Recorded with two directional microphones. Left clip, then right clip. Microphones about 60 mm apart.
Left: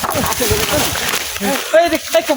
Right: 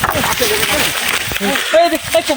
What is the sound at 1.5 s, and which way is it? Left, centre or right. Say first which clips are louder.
Speech: right 1 dB; centre.